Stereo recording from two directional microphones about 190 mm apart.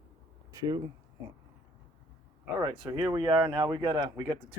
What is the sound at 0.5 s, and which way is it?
Speech, 20° right (ahead or behind).